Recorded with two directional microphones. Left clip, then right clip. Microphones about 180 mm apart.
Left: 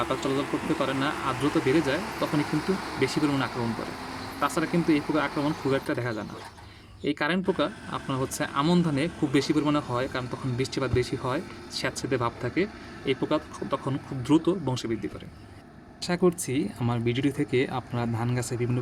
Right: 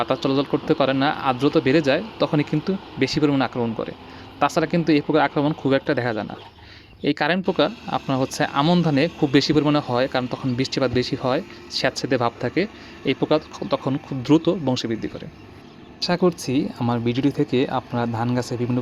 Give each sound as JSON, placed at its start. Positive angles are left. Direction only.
{"t": 0.0, "sound": "speech", "side_deg": -40}
{"t": 16.0, "sound": "speech", "side_deg": -30}